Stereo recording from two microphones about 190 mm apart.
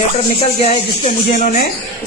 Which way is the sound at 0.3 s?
35° left (ahead or behind).